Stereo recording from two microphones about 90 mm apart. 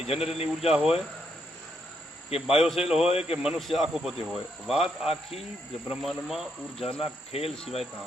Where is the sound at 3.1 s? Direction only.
90° left.